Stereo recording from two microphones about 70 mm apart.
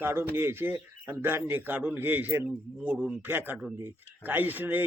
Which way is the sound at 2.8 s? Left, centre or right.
Centre.